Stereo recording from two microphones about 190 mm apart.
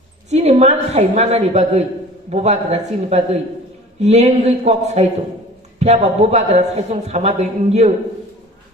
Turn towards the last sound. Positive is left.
turn(degrees=-35)  # may be behind; listen again after turning